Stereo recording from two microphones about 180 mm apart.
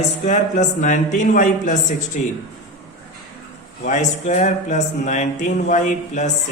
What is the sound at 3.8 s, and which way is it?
Speech, 40° left (ahead or behind).